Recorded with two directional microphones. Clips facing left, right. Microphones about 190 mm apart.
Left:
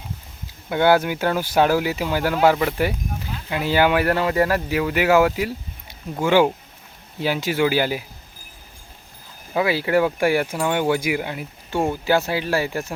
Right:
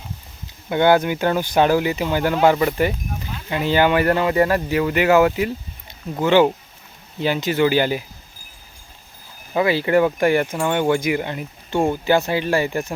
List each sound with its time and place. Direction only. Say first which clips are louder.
0.7 s speech: right 1 dB; 5° left (ahead or behind)
9.6 s speech: right 2 dB; 5° left (ahead or behind)